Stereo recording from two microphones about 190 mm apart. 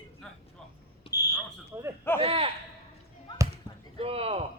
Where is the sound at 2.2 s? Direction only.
30° right (ahead or behind).